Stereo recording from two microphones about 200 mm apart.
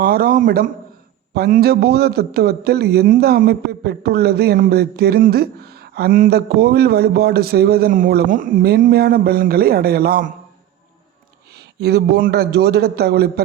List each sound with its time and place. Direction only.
0.0 s a man's voice: 45° right (ahead or behind)
11.5 s a man's voice: 55° right (ahead or behind)